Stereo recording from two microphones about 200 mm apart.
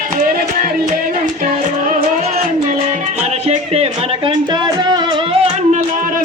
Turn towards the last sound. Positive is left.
turn(degrees=-30)  # may be behind; listen again after turning